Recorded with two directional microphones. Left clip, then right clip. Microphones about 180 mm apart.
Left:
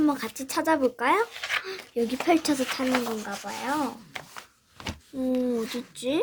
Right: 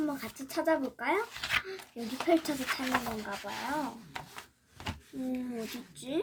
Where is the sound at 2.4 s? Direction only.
55° left (ahead or behind).